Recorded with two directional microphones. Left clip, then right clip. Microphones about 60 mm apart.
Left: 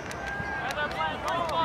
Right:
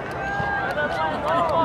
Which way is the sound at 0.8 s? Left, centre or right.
Left.